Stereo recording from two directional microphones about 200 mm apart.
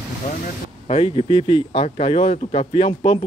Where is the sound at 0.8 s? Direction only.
30° left (ahead or behind).